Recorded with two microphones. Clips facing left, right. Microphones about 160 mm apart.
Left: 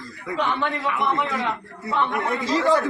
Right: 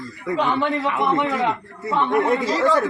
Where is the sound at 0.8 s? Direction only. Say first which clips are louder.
Right 3 dB; 30° right (ahead or behind).